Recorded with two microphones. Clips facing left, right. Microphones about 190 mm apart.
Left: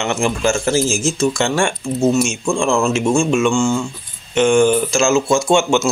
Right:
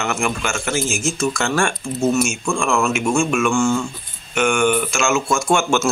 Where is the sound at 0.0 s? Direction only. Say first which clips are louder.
Left 5 dB; 30° left (ahead or behind).